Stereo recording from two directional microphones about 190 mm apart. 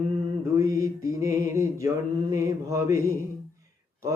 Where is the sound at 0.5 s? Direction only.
15° right (ahead or behind).